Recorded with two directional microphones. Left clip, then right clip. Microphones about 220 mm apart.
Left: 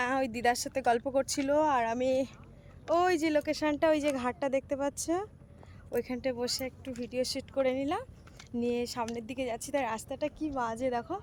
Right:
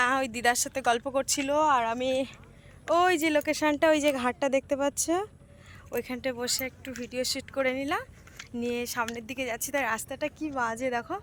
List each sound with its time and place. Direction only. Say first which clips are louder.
0.0 s speech: right 4 dB; 5° left (ahead or behind)
2.9 s speech: right 3 dB; 15° right (ahead or behind)
5.9 s speech: right 1 dB; 5° left (ahead or behind); by 11.2 s 10° right (ahead or behind)